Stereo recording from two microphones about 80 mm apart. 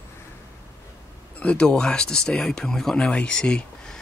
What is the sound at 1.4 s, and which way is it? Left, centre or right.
Speech, centre.